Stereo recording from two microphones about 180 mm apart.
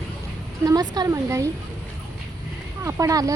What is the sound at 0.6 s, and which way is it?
Speech, 20° right (ahead or behind).